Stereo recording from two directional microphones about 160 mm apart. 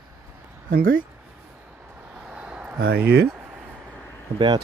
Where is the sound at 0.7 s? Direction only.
65° right (ahead or behind).